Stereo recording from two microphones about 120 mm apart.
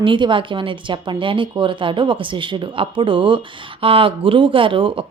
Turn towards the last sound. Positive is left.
turn(degrees=-45)  # may be behind; listen again after turning